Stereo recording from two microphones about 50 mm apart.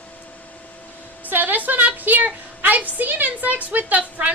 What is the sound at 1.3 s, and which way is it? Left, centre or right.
A woman's voice, right.